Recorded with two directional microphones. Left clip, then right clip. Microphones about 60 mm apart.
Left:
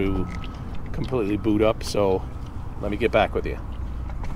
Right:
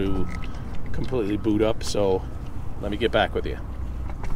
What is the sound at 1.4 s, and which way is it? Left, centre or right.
Speech, left.